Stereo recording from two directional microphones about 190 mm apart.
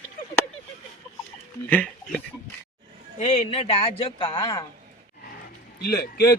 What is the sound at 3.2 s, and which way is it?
Speech, 35° left (ahead or behind).